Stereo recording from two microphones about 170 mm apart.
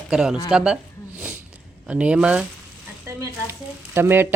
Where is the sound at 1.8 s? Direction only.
5° right (ahead or behind).